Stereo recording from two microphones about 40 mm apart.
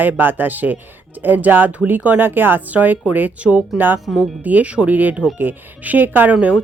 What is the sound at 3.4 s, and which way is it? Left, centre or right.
Speech, centre.